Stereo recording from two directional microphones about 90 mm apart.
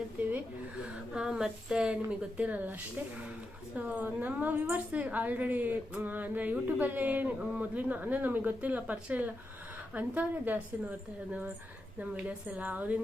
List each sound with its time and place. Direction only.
0.2 s a sound: 20° right (ahead or behind)
1.1 s a woman's voice: 10° right (ahead or behind)
3.8 s a woman's voice: 20° right (ahead or behind)
11.9 s a woman's voice: 15° right (ahead or behind)